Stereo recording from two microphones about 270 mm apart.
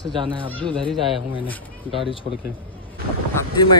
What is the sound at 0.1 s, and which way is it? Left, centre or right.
Speech, centre.